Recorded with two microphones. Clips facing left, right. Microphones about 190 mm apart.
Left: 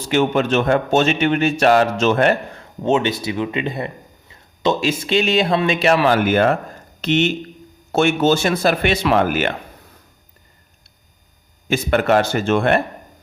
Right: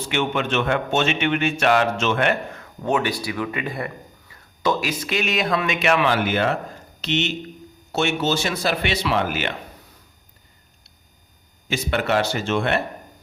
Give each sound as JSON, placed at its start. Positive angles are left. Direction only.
{"t": 0.1, "sound": "a man's voice", "side_deg": 40}
{"t": 11.7, "sound": "speech", "side_deg": 50}